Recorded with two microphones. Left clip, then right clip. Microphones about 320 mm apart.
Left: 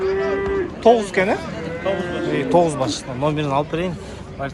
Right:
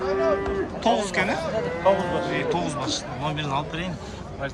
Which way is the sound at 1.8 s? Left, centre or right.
Right.